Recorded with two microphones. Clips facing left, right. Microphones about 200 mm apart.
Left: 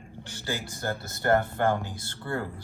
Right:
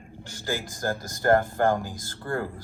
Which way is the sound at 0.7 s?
90° right.